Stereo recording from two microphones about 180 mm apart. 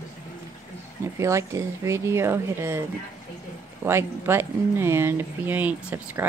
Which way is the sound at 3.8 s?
15° right (ahead or behind).